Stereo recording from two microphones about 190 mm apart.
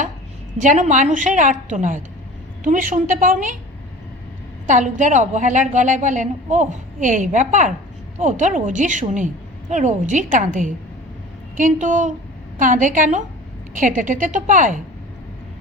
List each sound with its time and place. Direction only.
0.6 s a woman's voice: 40° right (ahead or behind)
4.6 s a woman's voice: 40° right (ahead or behind)